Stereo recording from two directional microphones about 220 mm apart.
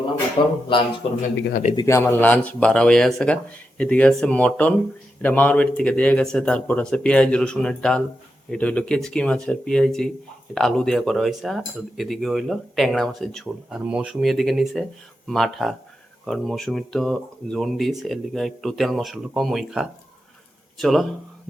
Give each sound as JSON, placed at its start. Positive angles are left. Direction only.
{"t": 0.4, "sound": "speech", "side_deg": 20}
{"t": 1.7, "sound": "speech", "side_deg": 15}